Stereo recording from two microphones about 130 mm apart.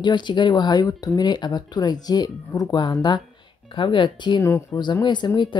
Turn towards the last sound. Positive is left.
turn(degrees=35)  # may be behind; listen again after turning